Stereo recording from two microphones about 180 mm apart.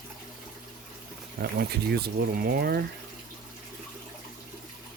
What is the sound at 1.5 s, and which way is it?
Speech, 65° right (ahead or behind).